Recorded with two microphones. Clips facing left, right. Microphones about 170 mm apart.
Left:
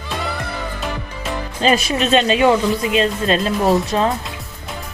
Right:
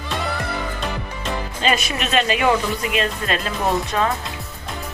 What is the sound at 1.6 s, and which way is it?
Speech, 35° left (ahead or behind).